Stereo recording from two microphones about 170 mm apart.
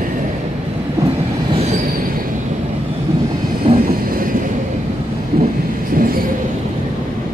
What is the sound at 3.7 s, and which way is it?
Vehicle, 30° right (ahead or behind).